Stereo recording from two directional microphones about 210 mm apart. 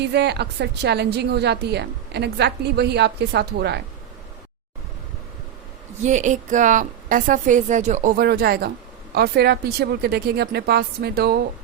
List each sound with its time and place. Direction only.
0.0 s a woman's voice: 55° right (ahead or behind)
6.0 s a woman's voice: 35° right (ahead or behind)